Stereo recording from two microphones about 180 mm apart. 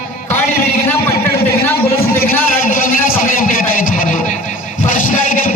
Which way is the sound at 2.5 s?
50° left (ahead or behind).